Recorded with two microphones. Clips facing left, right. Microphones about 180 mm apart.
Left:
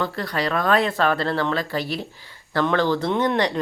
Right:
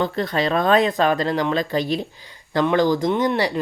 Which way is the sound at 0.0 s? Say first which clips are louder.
Right 4 dB; 20° right (ahead or behind).